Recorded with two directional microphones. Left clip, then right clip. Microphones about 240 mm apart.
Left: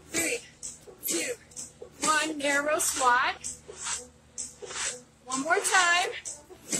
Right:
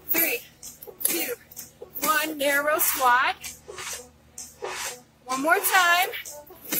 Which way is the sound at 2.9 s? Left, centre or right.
Centre.